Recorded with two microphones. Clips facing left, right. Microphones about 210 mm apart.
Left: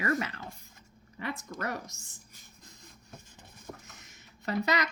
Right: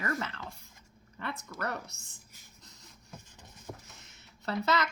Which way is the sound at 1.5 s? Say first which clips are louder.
Right 1 dB; 15° left (ahead or behind).